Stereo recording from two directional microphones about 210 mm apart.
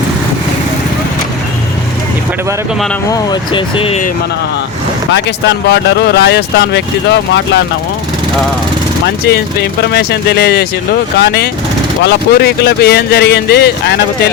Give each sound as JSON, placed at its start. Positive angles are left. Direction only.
{"t": 3.1, "sound": "speech", "side_deg": 20}
{"t": 5.1, "sound": "speech", "side_deg": 55}
{"t": 9.2, "sound": "speech", "side_deg": 50}